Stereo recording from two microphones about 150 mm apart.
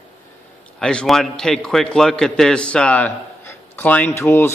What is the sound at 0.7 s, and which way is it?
A man's voice, 5° left (ahead or behind).